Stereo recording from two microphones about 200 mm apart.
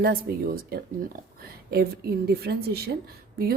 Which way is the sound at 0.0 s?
45° right (ahead or behind).